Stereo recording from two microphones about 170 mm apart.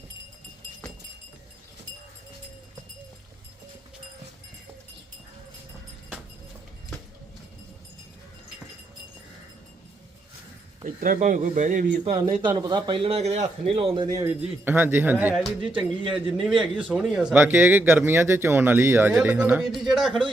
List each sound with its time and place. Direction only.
10.8 s speech: 55° right (ahead or behind)
12.3 s a man's voice: 30° right (ahead or behind); by 20.2 s centre (ahead or behind)